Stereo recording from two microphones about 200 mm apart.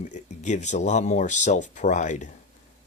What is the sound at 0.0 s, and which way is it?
Speech, 35° left (ahead or behind).